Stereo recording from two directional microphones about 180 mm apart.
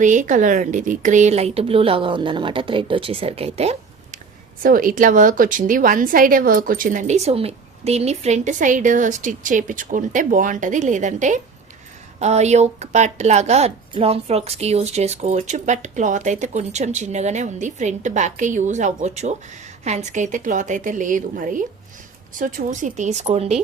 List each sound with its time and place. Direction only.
0.0 s speech: 45° right (ahead or behind)
4.6 s a woman's voice: 50° right (ahead or behind); by 23.5 s 35° right (ahead or behind)